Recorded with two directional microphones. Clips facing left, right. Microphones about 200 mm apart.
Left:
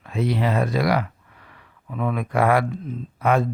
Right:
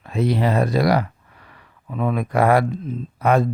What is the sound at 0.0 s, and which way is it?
Speech, 40° right (ahead or behind).